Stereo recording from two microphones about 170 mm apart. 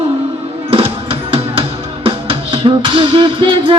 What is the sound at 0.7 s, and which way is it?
Music, 30° right (ahead or behind).